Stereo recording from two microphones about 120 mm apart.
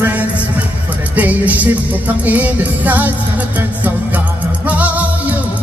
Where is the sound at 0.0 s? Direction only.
10° right (ahead or behind).